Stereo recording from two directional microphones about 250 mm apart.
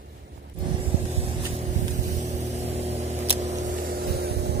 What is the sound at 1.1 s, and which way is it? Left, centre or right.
Vehicle, right.